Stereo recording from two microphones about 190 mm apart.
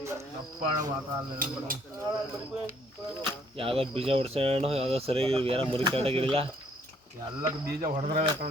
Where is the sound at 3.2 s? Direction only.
30° right (ahead or behind).